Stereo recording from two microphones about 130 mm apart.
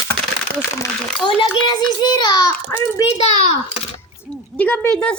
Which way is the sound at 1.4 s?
35° left (ahead or behind).